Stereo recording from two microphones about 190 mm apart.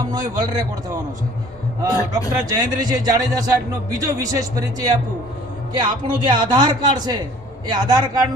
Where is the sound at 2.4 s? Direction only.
20° right (ahead or behind).